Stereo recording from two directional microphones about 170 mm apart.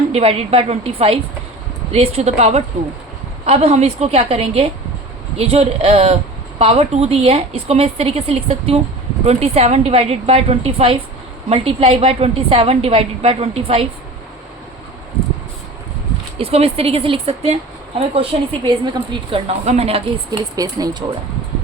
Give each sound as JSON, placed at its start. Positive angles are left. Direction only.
{"t": 0.1, "sound": "a woman's voice", "side_deg": -35}
{"t": 16.4, "sound": "a woman's voice", "side_deg": -35}
{"t": 20.6, "sound": "speech", "side_deg": -20}